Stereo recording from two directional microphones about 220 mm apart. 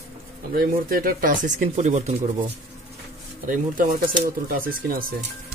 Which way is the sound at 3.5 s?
40° right (ahead or behind).